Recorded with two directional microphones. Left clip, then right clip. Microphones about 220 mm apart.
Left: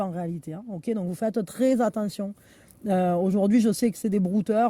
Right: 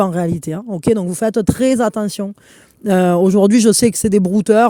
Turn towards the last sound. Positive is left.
turn(degrees=-35)  # may be behind; listen again after turning